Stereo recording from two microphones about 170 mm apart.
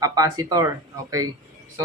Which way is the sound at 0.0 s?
20° right (ahead or behind).